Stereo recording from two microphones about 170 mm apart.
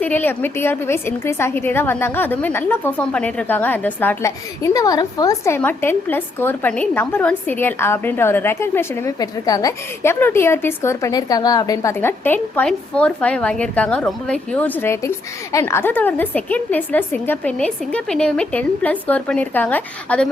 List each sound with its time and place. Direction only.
0.0 s a woman's voice: 10° left (ahead or behind)